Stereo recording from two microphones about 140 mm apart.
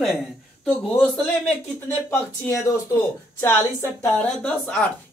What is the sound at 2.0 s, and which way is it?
A woman's voice, 20° left (ahead or behind).